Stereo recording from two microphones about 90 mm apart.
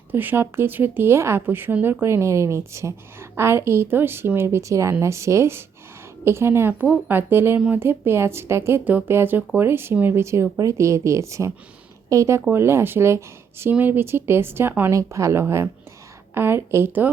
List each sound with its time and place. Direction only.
0.1 s speech: 20° right (ahead or behind)
8.8 s speech: 20° right (ahead or behind)
14.9 s speech: 35° right (ahead or behind)